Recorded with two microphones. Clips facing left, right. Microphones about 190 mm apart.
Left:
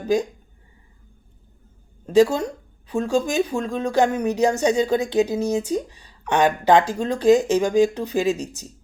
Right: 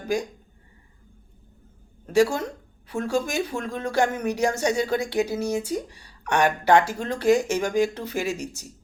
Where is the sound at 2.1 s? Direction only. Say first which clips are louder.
Left 4 dB; 20° left (ahead or behind).